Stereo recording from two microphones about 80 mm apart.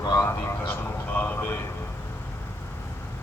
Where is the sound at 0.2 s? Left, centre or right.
Left.